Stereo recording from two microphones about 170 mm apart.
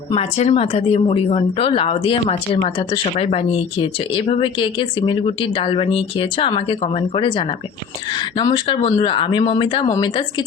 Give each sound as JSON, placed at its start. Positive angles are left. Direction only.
{"t": 0.1, "sound": "speech", "side_deg": 40}